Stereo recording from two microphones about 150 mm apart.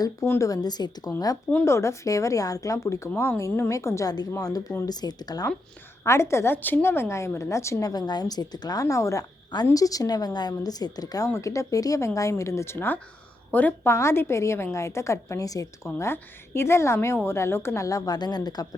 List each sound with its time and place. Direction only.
0.0 s a woman's voice: 20° left (ahead or behind)
1.5 s a woman's voice: 15° left (ahead or behind)